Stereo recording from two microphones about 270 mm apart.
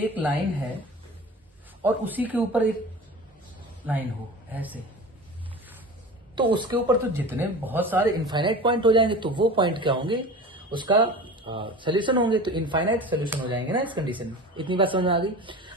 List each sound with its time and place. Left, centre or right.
0.0 s speech: centre
1.8 s speech: centre
4.5 s a man's voice: centre
6.3 s speech: centre